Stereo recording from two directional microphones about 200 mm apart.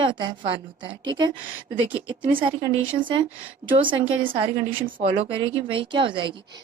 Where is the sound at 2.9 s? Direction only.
25° right (ahead or behind).